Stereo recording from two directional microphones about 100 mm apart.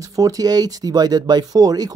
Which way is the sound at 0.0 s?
35° right (ahead or behind).